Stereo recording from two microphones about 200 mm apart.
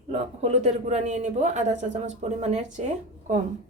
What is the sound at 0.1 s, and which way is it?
Speech, 35° right (ahead or behind).